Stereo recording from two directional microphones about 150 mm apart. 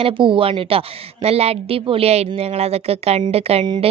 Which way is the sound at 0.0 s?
35° right (ahead or behind).